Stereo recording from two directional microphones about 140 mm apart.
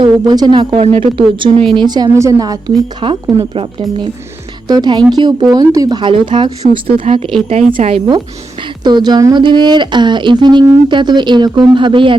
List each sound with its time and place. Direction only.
0.0 s a woman's voice: 30° right (ahead or behind)
4.7 s a woman's voice: 30° right (ahead or behind)
8.6 s a woman's voice: 30° right (ahead or behind)